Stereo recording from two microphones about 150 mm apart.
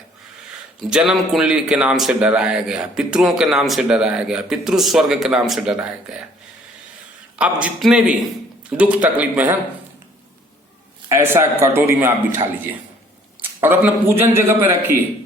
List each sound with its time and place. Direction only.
0.8 s a man's voice: 5° right (ahead or behind)
7.3 s a man's voice: 10° right (ahead or behind)
11.1 s a man's voice: 15° right (ahead or behind)
13.6 s a man's voice: 15° right (ahead or behind)